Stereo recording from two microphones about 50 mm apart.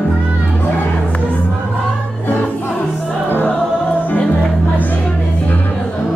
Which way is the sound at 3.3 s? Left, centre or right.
Left.